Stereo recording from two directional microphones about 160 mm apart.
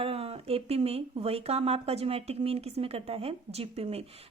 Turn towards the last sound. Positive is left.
turn(degrees=-40)  # may be behind; listen again after turning